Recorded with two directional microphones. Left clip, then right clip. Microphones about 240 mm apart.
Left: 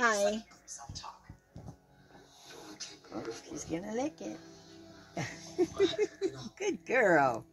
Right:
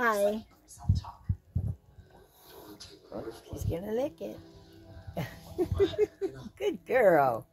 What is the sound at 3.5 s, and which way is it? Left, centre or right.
Speech, right.